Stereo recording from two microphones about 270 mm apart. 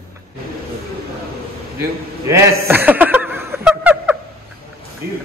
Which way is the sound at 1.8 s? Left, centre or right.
Centre.